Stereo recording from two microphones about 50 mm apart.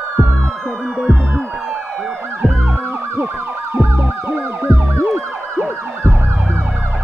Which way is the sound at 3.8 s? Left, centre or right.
Right.